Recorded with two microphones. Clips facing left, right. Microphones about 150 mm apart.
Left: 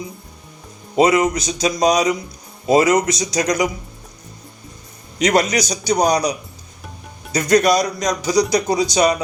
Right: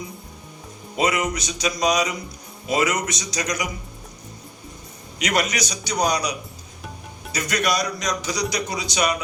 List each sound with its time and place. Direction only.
0.9 s a man's voice: 30° left (ahead or behind)
5.2 s a man's voice: 40° left (ahead or behind)
7.3 s a man's voice: 40° left (ahead or behind)